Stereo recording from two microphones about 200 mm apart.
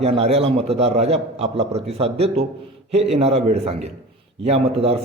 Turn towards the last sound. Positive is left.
turn(degrees=-30)  # may be behind; listen again after turning